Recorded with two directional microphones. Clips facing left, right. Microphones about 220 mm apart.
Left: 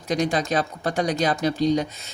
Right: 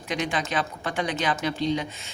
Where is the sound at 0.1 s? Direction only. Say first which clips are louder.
Left 5 dB; 40° left (ahead or behind).